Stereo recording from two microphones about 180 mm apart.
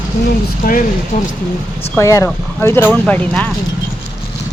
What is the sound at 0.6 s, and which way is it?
Speech, 50° left (ahead or behind).